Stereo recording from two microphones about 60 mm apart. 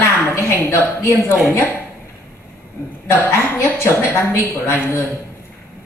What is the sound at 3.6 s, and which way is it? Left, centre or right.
Speech, left.